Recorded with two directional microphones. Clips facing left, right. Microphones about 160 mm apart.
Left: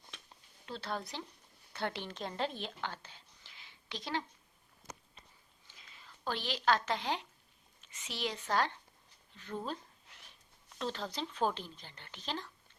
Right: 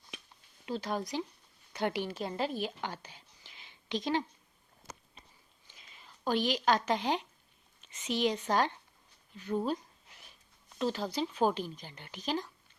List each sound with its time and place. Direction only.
0.6 s a woman's voice: 15° right (ahead or behind)
5.6 s a woman's voice: 20° right (ahead or behind)